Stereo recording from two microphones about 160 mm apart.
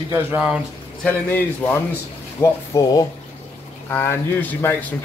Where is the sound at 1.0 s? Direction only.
10° left (ahead or behind).